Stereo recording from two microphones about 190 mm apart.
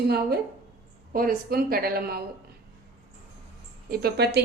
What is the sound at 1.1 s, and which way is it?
A woman's voice, 50° right (ahead or behind).